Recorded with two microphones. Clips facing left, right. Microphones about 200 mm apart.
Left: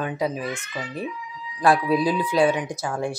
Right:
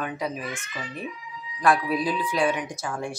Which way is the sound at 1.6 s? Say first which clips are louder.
Left 3 dB; 30° left (ahead or behind).